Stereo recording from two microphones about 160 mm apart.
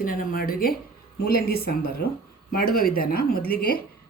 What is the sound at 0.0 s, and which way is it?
A woman's voice, 65° left (ahead or behind).